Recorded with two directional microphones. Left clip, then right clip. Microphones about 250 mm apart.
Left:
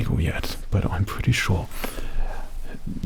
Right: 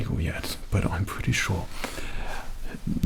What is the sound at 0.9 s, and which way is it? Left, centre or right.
Speech, left.